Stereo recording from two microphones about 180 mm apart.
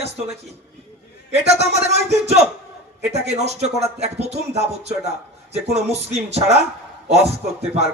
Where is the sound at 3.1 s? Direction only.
35° right (ahead or behind).